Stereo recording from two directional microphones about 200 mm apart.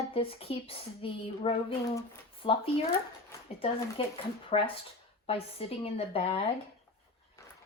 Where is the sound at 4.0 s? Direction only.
25° left (ahead or behind).